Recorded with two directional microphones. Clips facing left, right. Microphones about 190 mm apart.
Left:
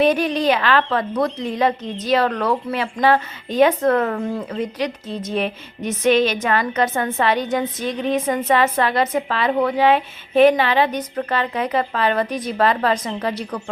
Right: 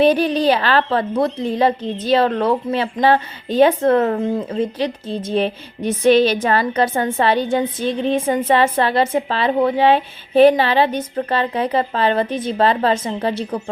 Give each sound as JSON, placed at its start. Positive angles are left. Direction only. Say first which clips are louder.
{"t": 0.0, "sound": "a woman's voice", "louder": "right 3 dB", "side_deg": -30}